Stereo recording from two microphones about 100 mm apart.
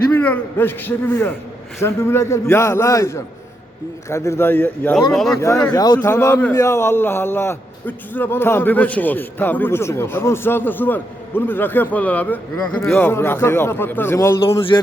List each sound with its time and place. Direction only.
0.1 s a man's voice: 20° left (ahead or behind)
4.9 s speech: centre (ahead or behind)
5.4 s a man's voice: 30° left (ahead or behind)
5.7 s a man's voice: 40° left (ahead or behind)
14.7 s a sound: 45° left (ahead or behind)